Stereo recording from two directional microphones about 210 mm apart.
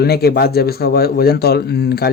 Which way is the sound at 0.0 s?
50° left (ahead or behind).